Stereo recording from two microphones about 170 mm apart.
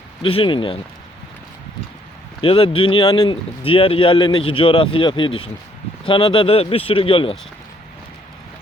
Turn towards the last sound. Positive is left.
turn(degrees=35)  # may be behind; listen again after turning